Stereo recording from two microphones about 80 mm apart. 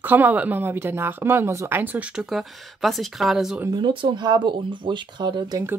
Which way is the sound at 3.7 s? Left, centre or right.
Right.